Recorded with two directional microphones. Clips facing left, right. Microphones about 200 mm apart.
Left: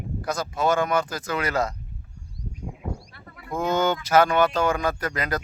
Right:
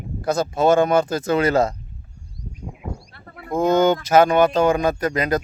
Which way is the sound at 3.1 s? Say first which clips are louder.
Right 5 dB; 55° right (ahead or behind).